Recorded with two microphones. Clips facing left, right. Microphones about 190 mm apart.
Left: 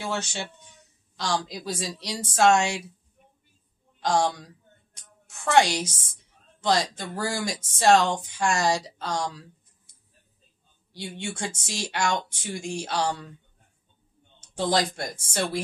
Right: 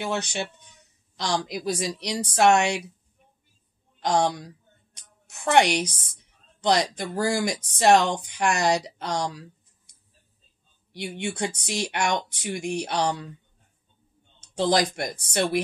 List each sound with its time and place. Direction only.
0.0 s a woman's voice: 20° right (ahead or behind)
4.0 s a woman's voice: 20° right (ahead or behind)
10.9 s a woman's voice: 20° right (ahead or behind)
14.6 s a woman's voice: 20° right (ahead or behind)